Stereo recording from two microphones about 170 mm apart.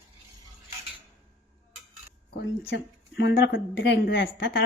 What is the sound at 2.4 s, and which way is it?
A woman's voice, 85° left.